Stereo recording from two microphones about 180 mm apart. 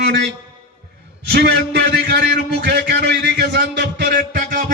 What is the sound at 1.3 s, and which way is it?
A man's voice, 65° right (ahead or behind).